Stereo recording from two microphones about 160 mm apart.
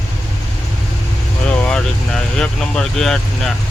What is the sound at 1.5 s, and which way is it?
Speech, 5° left (ahead or behind).